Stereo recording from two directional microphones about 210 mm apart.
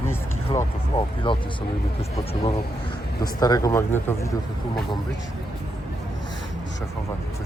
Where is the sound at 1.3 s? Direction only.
25° left (ahead or behind).